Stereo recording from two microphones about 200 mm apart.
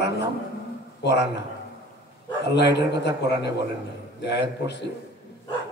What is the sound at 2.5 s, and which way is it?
A man's voice, 60° left (ahead or behind).